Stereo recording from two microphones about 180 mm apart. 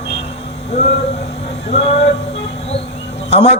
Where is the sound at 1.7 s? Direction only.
35° left (ahead or behind).